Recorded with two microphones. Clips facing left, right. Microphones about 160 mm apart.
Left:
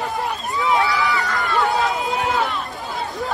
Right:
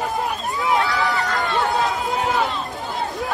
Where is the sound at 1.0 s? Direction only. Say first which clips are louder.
Even; 45° right (ahead or behind).